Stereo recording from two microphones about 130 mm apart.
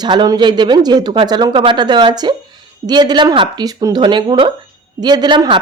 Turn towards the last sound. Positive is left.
turn(degrees=-40)  # may be behind; listen again after turning